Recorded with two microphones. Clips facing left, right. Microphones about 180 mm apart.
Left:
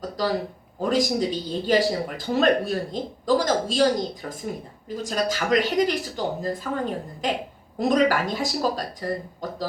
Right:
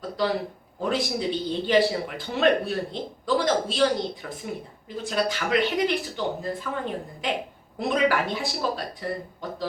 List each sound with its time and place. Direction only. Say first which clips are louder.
0.8 s a man's voice: left 4 dB; 40° left (ahead or behind)